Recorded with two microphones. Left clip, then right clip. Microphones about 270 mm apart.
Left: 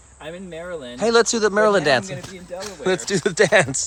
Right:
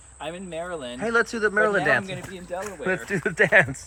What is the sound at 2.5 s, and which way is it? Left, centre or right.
Speech, centre.